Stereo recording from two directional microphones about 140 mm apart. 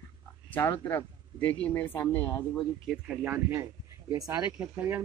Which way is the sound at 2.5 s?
5° right (ahead or behind).